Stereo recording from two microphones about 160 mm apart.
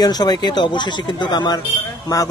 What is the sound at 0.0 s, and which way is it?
Speech, 25° left (ahead or behind).